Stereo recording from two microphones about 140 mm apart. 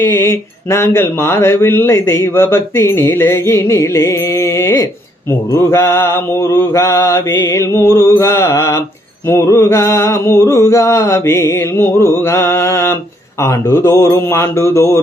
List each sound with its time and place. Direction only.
0.0 s mantra: 15° left (ahead or behind)